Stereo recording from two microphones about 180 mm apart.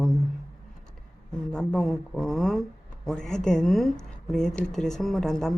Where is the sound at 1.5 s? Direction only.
Centre (ahead or behind).